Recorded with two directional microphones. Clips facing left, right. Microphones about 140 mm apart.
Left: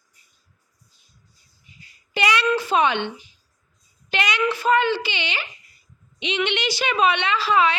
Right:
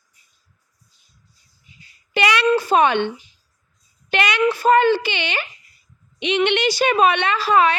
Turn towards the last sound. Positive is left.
turn(degrees=-50)  # may be behind; listen again after turning